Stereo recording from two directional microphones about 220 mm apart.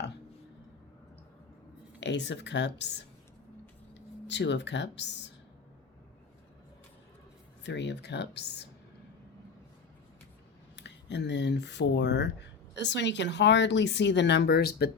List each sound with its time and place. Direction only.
2.0 s speech: 50° left (ahead or behind)
7.6 s speech: 55° left (ahead or behind)
10.8 s speech: 50° left (ahead or behind)